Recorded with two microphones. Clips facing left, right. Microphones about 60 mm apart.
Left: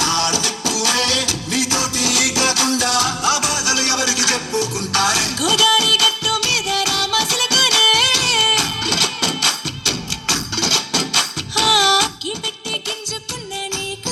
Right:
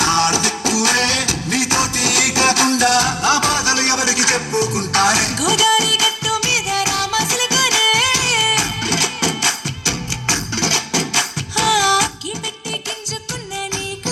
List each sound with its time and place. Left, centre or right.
0.0 s music: right